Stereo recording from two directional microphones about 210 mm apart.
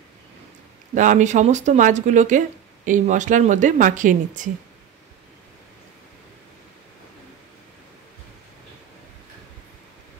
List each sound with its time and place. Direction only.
0.9 s speech: 35° right (ahead or behind)